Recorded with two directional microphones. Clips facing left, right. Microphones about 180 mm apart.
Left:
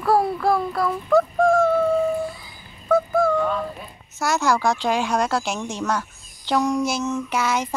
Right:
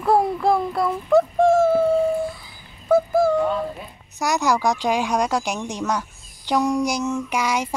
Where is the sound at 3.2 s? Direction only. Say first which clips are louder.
Right 2 dB; 20° right (ahead or behind).